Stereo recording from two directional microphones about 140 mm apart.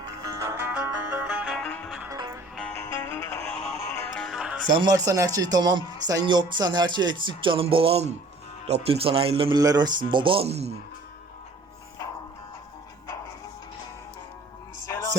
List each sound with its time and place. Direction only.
0.0 s music: 25° right (ahead or behind)
0.5 s music: 15° right (ahead or behind)
1.5 s music: 5° left (ahead or behind)
2.0 s music: 25° right (ahead or behind)
2.6 s music: 10° left (ahead or behind); by 4.6 s 5° right (ahead or behind)
4.7 s speech: 30° right (ahead or behind)
9.6 s speech: 30° right (ahead or behind); by 10.7 s 50° right (ahead or behind)
14.8 s a sound: 25° left (ahead or behind)